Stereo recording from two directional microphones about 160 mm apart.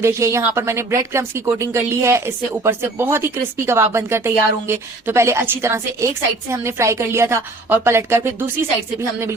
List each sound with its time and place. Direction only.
0.0 s speech: 20° right (ahead or behind)